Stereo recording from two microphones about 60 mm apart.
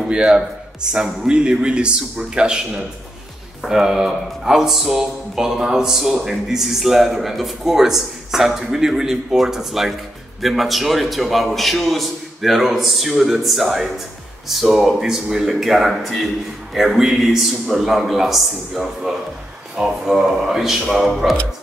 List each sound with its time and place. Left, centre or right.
0.1 s a man's voice: centre